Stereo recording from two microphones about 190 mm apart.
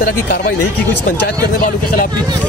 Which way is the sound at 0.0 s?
45° left (ahead or behind).